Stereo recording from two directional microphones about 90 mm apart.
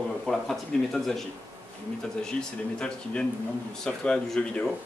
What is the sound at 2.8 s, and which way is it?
A man's voice, 10° left (ahead or behind).